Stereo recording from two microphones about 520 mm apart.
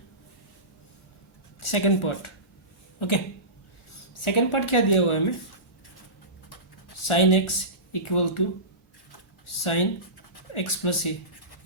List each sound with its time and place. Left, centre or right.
1.6 s a woman's voice: left
4.2 s a woman's voice: left
7.0 s a woman's voice: left
9.5 s a woman's voice: left